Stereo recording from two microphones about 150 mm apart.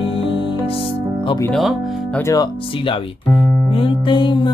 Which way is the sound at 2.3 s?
25° left (ahead or behind).